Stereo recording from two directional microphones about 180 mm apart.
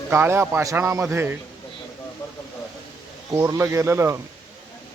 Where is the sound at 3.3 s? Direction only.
15° right (ahead or behind).